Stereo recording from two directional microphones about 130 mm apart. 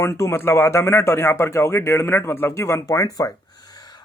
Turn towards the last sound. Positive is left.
turn(degrees=25)  # may be behind; listen again after turning